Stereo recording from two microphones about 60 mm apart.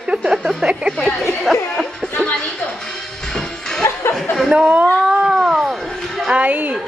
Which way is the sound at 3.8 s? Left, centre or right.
Left.